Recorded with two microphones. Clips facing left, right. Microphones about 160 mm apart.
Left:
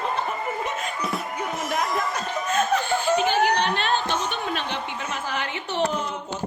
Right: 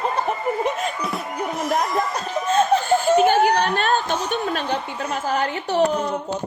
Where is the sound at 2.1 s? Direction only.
30° right (ahead or behind).